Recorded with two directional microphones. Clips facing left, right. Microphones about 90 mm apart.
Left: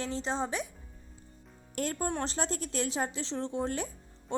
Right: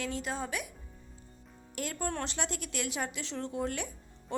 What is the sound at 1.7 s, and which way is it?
A woman's voice, 40° left (ahead or behind).